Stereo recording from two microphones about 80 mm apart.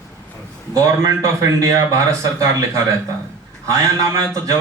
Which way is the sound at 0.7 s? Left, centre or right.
Right.